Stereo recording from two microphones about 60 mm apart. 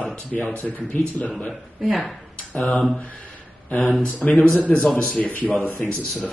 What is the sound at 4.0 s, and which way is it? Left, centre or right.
Speech, left.